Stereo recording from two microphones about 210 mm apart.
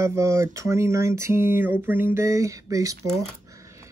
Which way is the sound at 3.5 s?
15° right (ahead or behind).